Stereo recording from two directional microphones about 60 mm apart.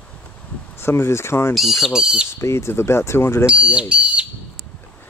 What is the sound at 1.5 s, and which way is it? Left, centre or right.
Speech, centre.